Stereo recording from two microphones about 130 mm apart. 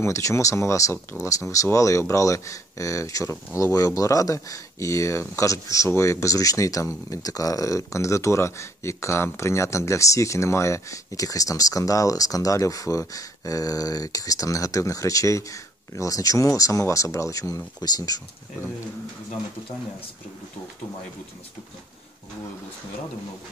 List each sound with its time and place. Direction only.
0.0 s speech: 25° left (ahead or behind)